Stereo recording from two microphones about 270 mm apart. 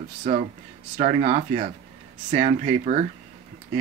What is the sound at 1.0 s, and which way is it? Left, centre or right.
Speech, right.